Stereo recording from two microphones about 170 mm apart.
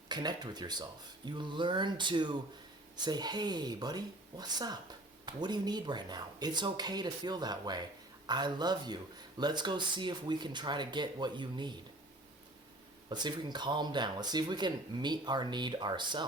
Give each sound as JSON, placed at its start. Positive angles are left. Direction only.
{"t": 0.1, "sound": "speech", "side_deg": -25}
{"t": 13.1, "sound": "speech", "side_deg": -25}